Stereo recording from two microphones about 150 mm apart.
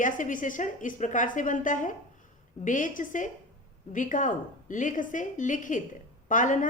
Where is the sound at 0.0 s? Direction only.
60° left (ahead or behind).